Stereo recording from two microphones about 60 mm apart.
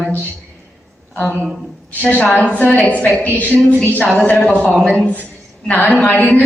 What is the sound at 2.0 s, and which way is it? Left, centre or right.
A woman's voice, centre.